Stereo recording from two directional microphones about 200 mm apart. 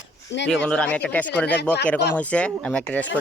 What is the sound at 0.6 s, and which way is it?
Speech, 5° left (ahead or behind).